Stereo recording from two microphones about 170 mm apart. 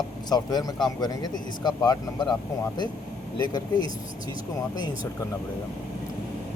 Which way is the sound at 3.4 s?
25° left (ahead or behind).